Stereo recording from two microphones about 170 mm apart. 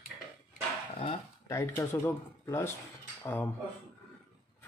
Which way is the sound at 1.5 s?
15° left (ahead or behind).